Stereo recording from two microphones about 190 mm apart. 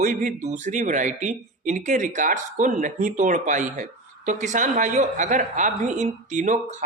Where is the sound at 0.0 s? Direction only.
45° right (ahead or behind).